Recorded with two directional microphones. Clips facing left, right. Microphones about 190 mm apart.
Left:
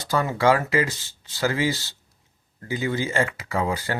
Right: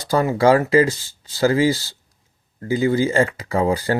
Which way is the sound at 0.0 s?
35° right (ahead or behind).